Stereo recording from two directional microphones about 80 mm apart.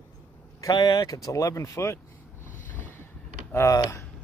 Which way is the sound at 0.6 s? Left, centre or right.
Left.